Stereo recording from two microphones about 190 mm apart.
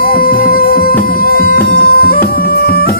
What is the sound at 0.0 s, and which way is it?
Music, 50° left (ahead or behind).